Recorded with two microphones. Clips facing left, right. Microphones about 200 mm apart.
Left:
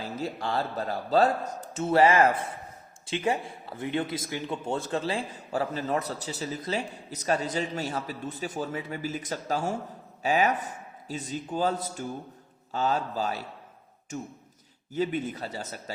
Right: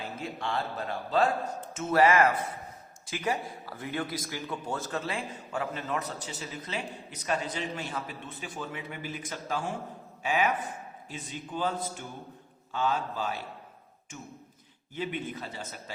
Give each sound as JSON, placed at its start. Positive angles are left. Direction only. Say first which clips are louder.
{"t": 0.2, "sound": "a man's voice", "louder": "left 4 dB", "side_deg": 40}
{"t": 14.9, "sound": "a man's voice", "louder": "left 6 dB", "side_deg": 40}